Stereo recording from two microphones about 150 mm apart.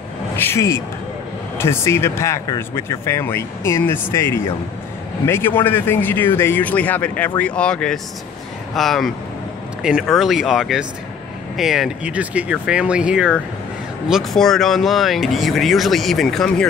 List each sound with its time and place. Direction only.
0.4 s speech: 20° left (ahead or behind)